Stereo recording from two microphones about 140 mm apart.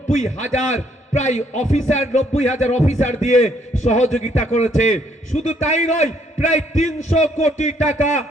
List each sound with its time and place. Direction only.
0.1 s a man's voice: 60° left (ahead or behind)